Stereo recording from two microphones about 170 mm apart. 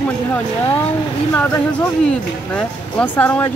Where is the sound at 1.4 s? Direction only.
5° left (ahead or behind).